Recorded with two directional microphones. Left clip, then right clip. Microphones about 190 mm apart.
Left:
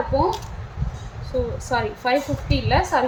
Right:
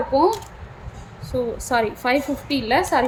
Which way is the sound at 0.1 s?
35° right (ahead or behind).